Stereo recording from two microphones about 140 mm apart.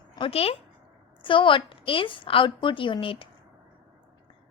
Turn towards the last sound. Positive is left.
turn(degrees=40)  # may be behind; listen again after turning